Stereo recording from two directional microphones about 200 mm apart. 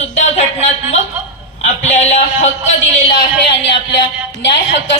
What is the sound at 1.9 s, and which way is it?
Speech, 35° left (ahead or behind).